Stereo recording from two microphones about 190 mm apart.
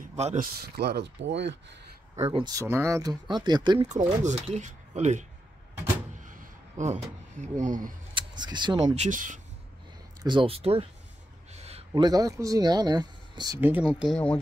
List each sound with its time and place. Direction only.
0.0 s a sound: 35° right (ahead or behind)
0.7 s speech: 60° right (ahead or behind)
2.3 s speech: 20° right (ahead or behind)
3.9 s speech: 40° right (ahead or behind)
6.8 s speech: 40° right (ahead or behind)
8.1 s speech: 25° right (ahead or behind)
9.0 s speech: 45° right (ahead or behind)
10.2 s speech: 25° right (ahead or behind)
11.5 s a sound: 35° right (ahead or behind)
11.9 s speech: 20° right (ahead or behind)
13.6 s speech: 10° right (ahead or behind)